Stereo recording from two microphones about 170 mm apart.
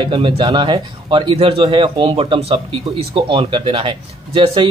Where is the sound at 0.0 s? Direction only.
30° right (ahead or behind).